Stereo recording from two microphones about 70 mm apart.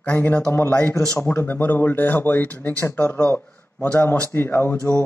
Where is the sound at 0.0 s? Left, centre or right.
Left.